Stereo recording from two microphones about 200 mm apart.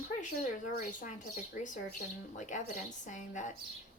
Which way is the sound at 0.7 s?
40° left (ahead or behind).